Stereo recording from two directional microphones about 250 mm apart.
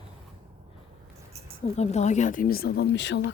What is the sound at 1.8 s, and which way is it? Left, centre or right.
Speech, left.